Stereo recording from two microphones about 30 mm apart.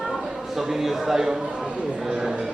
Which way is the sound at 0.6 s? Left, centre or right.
Centre.